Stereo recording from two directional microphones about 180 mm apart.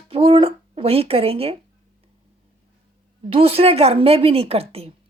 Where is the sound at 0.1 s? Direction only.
30° right (ahead or behind).